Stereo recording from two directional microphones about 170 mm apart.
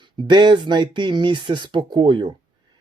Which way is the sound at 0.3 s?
25° right (ahead or behind).